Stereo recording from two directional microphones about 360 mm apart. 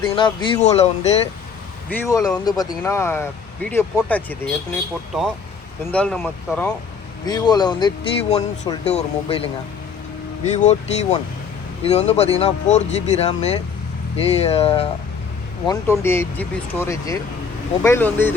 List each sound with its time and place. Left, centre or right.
0.0 s speech: centre
5.9 s speech: centre
10.5 s speech: centre